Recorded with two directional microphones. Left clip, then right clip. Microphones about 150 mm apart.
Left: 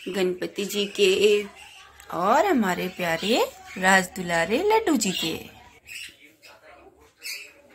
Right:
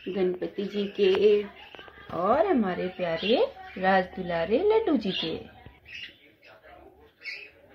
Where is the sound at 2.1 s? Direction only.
20° left (ahead or behind).